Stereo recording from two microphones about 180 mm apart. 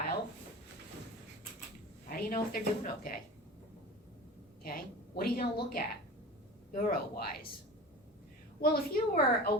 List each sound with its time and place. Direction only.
2.0 s speech: 55° left (ahead or behind)
4.6 s a woman's voice: 55° left (ahead or behind)
8.6 s a woman's voice: 60° left (ahead or behind)